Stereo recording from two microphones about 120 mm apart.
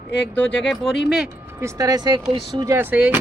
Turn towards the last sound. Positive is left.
turn(degrees=-15)  # may be behind; listen again after turning